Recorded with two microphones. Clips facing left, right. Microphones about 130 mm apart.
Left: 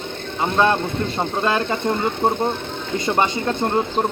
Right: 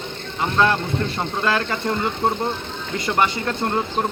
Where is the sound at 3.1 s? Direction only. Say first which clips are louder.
Left 1 dB; 20° left (ahead or behind).